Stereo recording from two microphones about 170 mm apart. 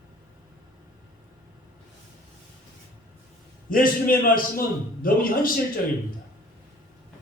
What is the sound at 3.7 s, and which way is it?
A man's voice, 55° left (ahead or behind).